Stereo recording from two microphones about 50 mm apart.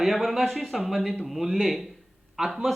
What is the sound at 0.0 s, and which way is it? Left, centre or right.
Speech, centre.